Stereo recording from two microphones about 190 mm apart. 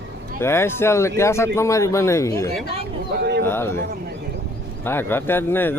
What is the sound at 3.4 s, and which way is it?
Speech, 10° left (ahead or behind).